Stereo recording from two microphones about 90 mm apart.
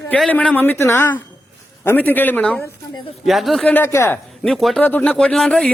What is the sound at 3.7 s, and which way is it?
Speech, 25° left (ahead or behind).